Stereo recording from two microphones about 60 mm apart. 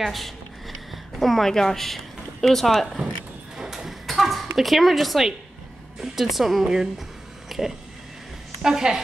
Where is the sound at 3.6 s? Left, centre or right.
Centre.